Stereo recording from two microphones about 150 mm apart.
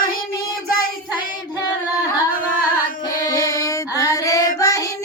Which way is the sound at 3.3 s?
20° left (ahead or behind).